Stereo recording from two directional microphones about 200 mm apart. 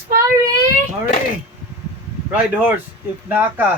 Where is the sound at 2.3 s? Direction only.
5° right (ahead or behind).